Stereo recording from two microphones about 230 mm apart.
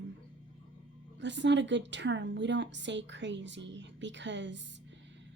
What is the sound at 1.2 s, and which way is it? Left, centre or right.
A woman's voice, right.